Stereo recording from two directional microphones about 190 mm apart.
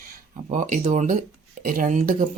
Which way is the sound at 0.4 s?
40° right (ahead or behind).